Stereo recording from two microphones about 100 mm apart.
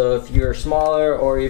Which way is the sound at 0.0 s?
15° left (ahead or behind).